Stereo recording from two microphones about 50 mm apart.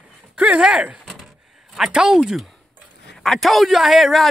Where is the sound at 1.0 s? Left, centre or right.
Centre.